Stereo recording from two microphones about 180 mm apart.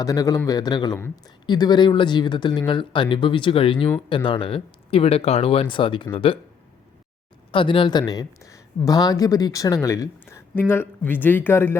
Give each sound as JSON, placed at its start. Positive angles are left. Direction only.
{"t": 0.0, "sound": "speech", "side_deg": 20}
{"t": 7.5, "sound": "speech", "side_deg": 30}